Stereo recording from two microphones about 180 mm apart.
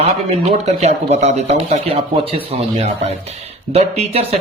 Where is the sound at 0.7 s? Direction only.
35° right (ahead or behind).